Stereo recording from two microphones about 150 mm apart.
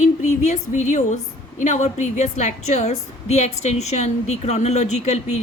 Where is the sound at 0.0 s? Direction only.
50° left (ahead or behind).